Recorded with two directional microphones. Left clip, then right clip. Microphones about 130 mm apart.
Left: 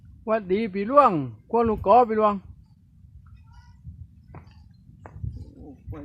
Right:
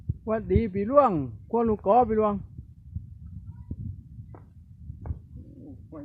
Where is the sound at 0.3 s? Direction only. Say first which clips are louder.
Left 3 dB; 30° left (ahead or behind).